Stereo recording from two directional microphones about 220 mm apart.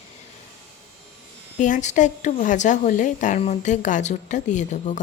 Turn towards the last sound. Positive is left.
turn(degrees=35)  # may be behind; listen again after turning